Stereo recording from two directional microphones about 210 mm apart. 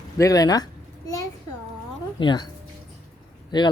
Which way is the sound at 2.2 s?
20° left (ahead or behind).